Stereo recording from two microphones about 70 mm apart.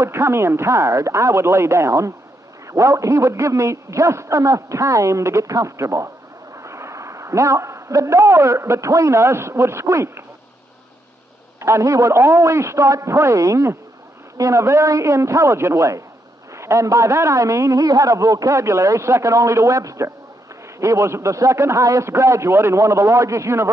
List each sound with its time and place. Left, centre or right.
0.0 s a man's voice: right
11.6 s a man's voice: right